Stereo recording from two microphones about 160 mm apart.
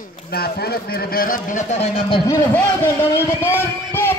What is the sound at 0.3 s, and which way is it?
Speech, 75° left (ahead or behind).